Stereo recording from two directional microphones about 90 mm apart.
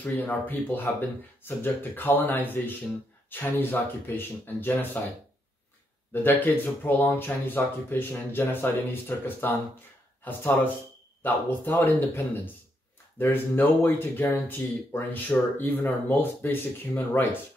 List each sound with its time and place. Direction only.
0.0 s speech: 20° left (ahead or behind)
6.2 s speech: 20° left (ahead or behind)
13.2 s speech: 25° left (ahead or behind)